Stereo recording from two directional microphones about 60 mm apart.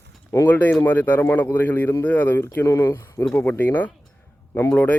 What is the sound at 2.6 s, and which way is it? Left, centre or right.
Speech, left.